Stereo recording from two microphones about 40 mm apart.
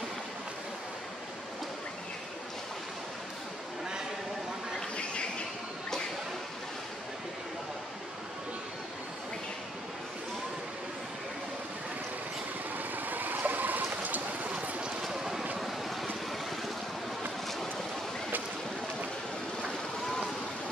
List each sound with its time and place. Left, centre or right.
12.7 s stream: right
15.0 s vehicle: centre